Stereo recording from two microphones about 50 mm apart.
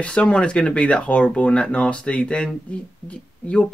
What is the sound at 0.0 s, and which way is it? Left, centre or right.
Speech, left.